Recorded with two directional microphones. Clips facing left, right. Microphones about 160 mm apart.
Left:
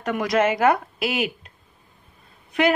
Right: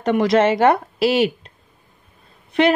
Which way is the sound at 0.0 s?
25° right (ahead or behind).